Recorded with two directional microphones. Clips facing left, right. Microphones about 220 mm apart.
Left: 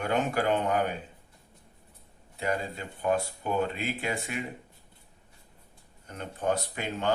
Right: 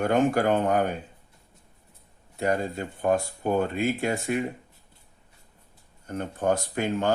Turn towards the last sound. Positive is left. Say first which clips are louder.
# right 5 dB
turn(degrees=-45)  # may be behind; listen again after turning